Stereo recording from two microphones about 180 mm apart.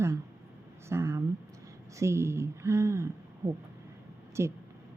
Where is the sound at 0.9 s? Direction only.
15° right (ahead or behind).